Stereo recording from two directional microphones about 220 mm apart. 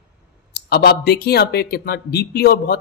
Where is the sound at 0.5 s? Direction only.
45° left (ahead or behind).